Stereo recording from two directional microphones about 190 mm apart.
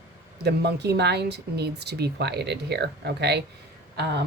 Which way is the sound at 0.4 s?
60° right (ahead or behind).